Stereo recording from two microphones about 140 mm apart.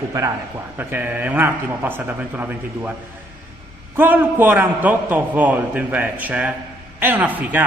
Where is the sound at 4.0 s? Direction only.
15° right (ahead or behind).